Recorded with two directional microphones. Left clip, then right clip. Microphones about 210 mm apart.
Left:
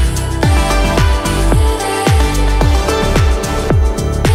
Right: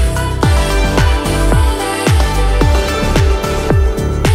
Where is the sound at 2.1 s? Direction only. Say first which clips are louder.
Even; centre (ahead or behind).